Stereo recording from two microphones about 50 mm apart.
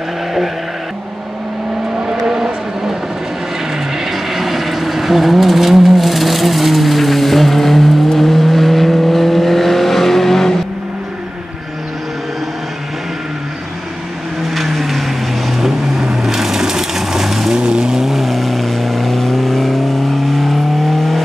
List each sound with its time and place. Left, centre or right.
2.0 s vehicle: centre
4.0 s vehicle: centre
14.5 s vehicle: centre
17.6 s vehicle: centre
18.0 s vehicle: centre